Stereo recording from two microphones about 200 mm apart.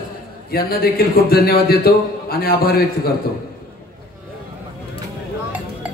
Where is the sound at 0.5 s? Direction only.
50° left (ahead or behind).